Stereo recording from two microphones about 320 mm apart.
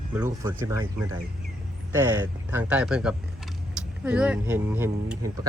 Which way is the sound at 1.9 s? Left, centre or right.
Centre.